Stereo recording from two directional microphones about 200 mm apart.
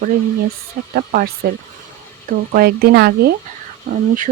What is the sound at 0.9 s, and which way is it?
Speech, 50° right (ahead or behind).